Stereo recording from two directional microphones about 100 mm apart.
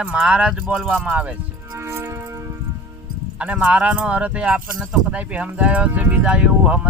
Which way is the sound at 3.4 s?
10° right (ahead or behind).